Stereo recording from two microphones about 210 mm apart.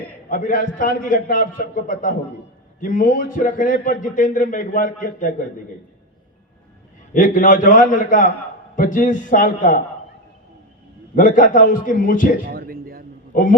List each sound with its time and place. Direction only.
0.3 s a man's voice: 40° left (ahead or behind)
7.1 s a man's voice: 40° left (ahead or behind)
11.1 s a man's voice: 40° left (ahead or behind)
12.5 s a sound: 45° right (ahead or behind)
13.3 s a man's voice: 40° left (ahead or behind)